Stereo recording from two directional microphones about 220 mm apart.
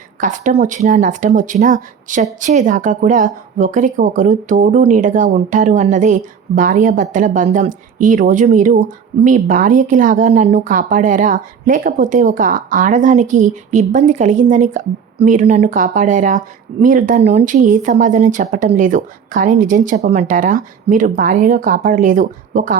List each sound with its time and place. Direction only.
0.2 s speech: 35° right (ahead or behind)